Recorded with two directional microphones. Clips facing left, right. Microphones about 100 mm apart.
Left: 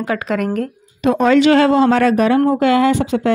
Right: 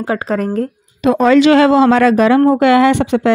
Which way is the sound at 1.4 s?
90° right.